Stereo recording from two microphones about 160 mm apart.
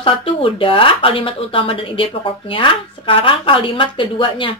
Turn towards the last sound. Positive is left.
turn(degrees=35)  # may be behind; listen again after turning